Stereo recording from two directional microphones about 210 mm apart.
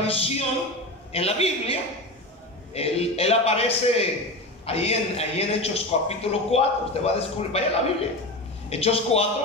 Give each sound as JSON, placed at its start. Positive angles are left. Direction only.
{"t": 0.0, "sound": "a man's voice", "side_deg": 25}